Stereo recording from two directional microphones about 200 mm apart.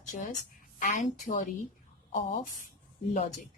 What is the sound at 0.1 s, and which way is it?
A woman's voice, 40° left (ahead or behind).